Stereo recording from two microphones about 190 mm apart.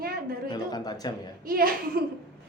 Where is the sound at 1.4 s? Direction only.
50° right (ahead or behind).